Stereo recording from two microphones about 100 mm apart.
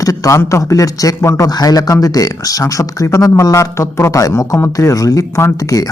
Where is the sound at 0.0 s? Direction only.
35° left (ahead or behind).